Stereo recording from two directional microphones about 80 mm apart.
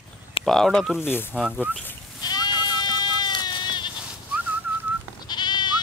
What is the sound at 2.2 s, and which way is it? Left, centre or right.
Sheep, left.